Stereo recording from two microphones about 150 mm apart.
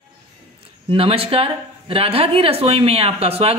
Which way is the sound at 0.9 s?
40° right (ahead or behind).